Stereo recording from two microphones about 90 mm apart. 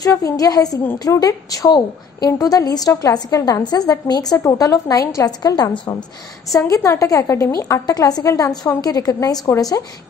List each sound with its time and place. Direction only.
0.0 s a woman's voice: 40° left (ahead or behind)
6.7 s a woman's voice: 35° left (ahead or behind)